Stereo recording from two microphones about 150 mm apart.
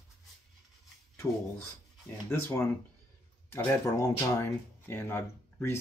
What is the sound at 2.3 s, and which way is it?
Speech, 15° left (ahead or behind).